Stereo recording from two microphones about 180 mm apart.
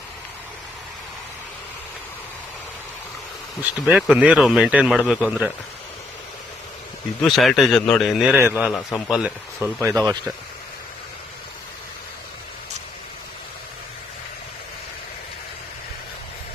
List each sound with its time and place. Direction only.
3.6 s speech: 10° right (ahead or behind)
7.2 s speech: centre (ahead or behind)